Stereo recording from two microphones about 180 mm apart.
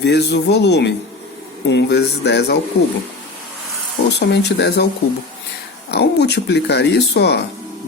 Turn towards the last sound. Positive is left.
turn(degrees=65)  # may be behind; listen again after turning